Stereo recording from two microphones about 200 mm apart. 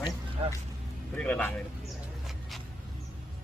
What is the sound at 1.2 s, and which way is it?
Speech, 5° left (ahead or behind).